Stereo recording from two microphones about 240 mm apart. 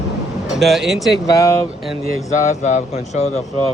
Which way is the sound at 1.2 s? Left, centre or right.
Centre.